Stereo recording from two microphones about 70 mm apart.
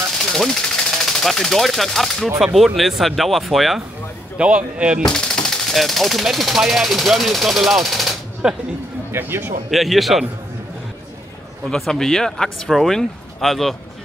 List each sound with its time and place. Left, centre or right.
0.2 s speech: centre
4.4 s speech: centre
5.0 s speech: centre
8.4 s speech: centre
9.1 s speech: right
9.7 s speech: centre
11.7 s speech: centre